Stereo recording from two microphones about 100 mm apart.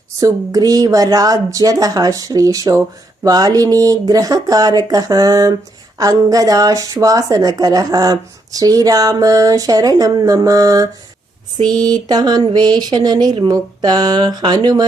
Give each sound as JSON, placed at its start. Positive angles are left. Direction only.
{"t": 0.2, "sound": "a woman's voice", "side_deg": -35}